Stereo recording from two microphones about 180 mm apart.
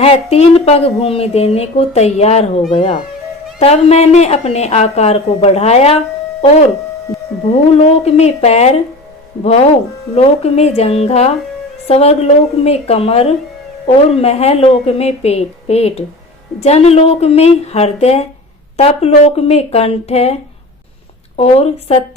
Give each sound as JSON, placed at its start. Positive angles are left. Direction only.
{"t": 0.0, "sound": "a woman's voice", "side_deg": 35}
{"t": 7.1, "sound": "a sound", "side_deg": 0}
{"t": 7.7, "sound": "a woman's voice", "side_deg": 35}